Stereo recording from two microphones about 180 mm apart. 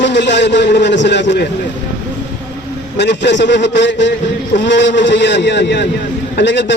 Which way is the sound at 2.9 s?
75° left (ahead or behind).